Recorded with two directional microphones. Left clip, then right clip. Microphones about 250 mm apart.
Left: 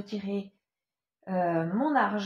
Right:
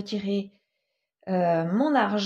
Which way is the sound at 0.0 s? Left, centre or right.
Right.